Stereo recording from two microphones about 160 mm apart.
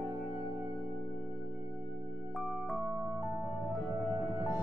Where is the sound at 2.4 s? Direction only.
Centre (ahead or behind).